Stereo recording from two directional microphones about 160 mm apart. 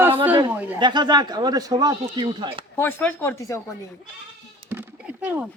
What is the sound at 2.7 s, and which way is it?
Speech, 15° left (ahead or behind).